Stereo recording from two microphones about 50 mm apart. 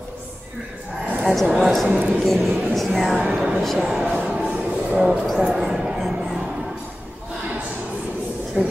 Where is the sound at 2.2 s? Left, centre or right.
Centre.